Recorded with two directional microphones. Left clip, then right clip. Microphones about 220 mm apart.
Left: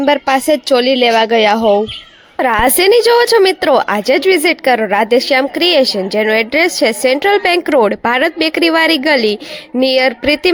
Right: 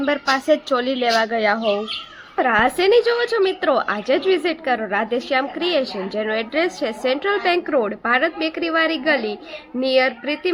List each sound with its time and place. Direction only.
0.0 s a woman's voice: 25° left (ahead or behind)